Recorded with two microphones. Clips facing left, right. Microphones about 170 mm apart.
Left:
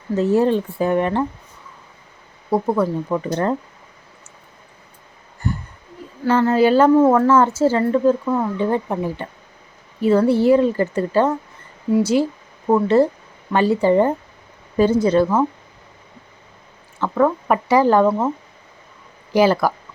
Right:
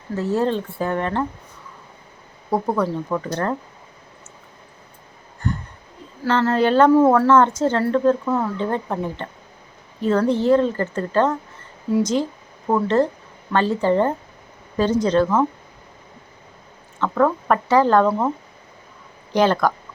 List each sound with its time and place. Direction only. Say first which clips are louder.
0.2 s speech: left 4 dB; 15° left (ahead or behind)
2.5 s speech: left 2 dB; centre (ahead or behind)
3.1 s speech: left 3 dB; 15° left (ahead or behind)
5.4 s a sound: left 1 dB; 10° left (ahead or behind)
6.2 s speech: left 3 dB; 10° left (ahead or behind)
17.0 s speech: left 1 dB; 10° left (ahead or behind)
19.3 s speech: left 2 dB; 5° left (ahead or behind)